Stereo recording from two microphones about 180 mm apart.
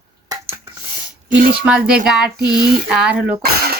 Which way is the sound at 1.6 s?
5° right (ahead or behind).